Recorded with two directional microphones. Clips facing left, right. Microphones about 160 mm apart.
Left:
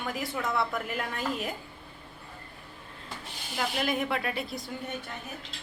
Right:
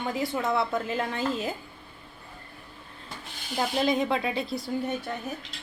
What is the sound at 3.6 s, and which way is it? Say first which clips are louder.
A woman's voice: right 4 dB; 25° right (ahead or behind).